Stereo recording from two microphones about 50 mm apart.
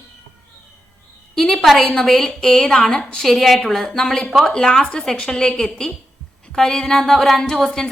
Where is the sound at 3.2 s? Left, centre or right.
Centre.